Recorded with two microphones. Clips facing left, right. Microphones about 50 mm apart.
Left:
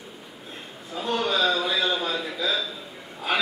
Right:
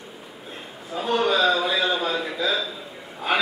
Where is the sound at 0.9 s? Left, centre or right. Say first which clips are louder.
Right 4 dB; centre.